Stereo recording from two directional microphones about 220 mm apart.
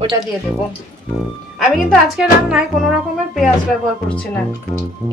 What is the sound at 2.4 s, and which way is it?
Music, 5° right (ahead or behind).